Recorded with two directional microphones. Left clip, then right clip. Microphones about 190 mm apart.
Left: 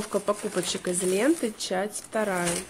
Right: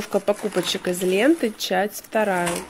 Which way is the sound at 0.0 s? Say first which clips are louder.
Right 5 dB; 10° right (ahead or behind).